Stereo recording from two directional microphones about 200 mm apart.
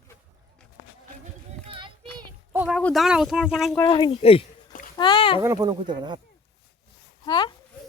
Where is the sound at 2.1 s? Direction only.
10° right (ahead or behind).